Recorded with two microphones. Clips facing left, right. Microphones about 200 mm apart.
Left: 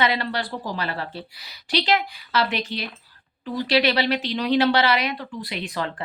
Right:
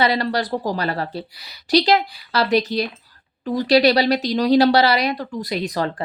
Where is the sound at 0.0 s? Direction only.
40° right (ahead or behind).